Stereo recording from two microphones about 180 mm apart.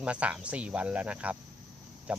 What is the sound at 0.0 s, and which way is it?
Speech, 5° right (ahead or behind).